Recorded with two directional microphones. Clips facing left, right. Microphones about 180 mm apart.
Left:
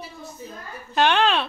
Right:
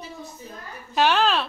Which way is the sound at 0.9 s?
5° right (ahead or behind).